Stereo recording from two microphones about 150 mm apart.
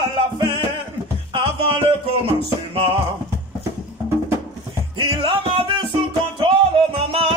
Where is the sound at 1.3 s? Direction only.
35° right (ahead or behind).